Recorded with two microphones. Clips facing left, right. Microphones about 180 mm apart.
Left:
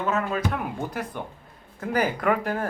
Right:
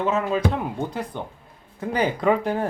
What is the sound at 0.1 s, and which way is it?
Speech, 20° right (ahead or behind).